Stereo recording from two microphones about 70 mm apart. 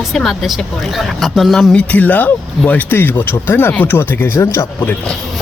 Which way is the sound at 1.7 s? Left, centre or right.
Left.